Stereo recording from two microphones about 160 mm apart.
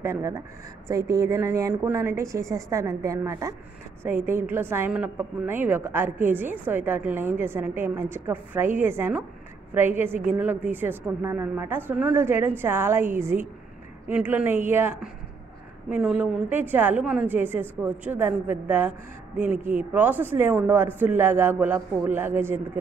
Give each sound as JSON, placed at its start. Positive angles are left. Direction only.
{"t": 0.0, "sound": "a woman's voice", "side_deg": -15}